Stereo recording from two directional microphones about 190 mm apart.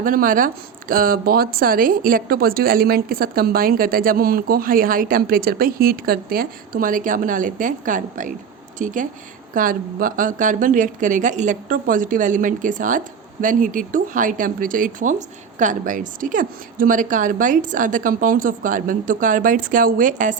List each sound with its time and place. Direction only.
0.0 s speech: 45° right (ahead or behind)